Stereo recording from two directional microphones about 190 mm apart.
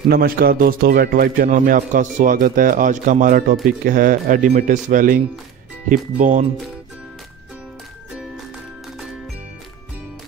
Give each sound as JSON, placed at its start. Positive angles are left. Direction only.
{"t": 0.1, "sound": "a man's voice", "side_deg": -50}